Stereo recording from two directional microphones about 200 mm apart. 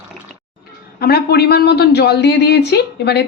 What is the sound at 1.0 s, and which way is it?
Speech, 50° left (ahead or behind).